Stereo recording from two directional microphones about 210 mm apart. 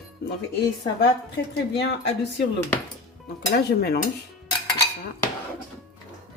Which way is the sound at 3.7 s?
50° left (ahead or behind).